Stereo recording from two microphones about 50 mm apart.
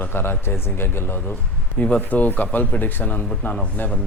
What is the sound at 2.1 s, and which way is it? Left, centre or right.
Speech, left.